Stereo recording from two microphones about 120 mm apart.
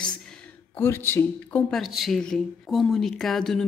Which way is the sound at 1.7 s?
Centre (ahead or behind).